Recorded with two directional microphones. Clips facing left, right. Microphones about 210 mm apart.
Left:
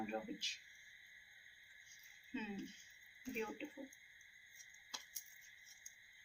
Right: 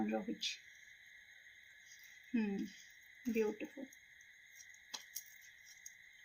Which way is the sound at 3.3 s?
30° right (ahead or behind).